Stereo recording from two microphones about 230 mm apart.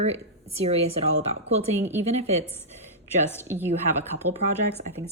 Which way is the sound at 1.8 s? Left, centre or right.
Centre.